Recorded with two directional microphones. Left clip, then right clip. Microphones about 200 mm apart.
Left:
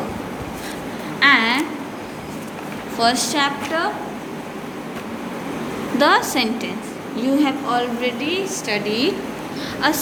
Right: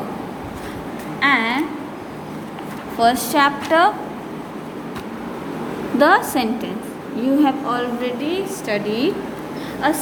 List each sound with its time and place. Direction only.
1.2 s a sound: 10° right (ahead or behind)
3.0 s a woman's voice: 20° right (ahead or behind)
3.7 s a woman's voice: 40° right (ahead or behind)
6.0 s a woman's voice: 15° right (ahead or behind)